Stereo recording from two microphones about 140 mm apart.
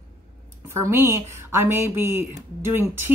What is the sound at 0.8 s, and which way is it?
Speech, 20° right (ahead or behind).